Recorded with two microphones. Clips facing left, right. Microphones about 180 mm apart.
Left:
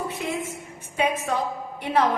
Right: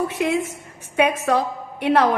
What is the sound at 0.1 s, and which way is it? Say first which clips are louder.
A woman's voice: right 7 dB; 75° right (ahead or behind).